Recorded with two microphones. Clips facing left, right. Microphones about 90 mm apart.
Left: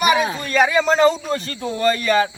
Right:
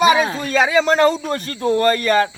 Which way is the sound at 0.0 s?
25° right (ahead or behind).